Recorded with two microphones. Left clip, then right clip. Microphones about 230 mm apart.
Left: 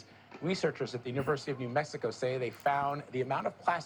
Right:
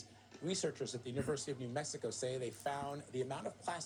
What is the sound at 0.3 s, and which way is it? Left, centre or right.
Speech, centre.